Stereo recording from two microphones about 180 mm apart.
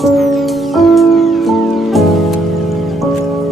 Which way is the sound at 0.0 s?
Centre (ahead or behind).